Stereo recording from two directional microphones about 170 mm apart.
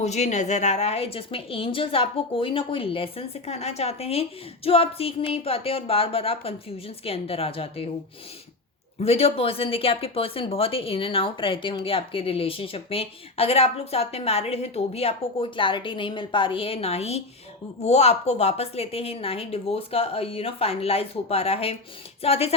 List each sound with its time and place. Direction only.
0.0 s speech: 40° left (ahead or behind)
9.0 s speech: 35° left (ahead or behind)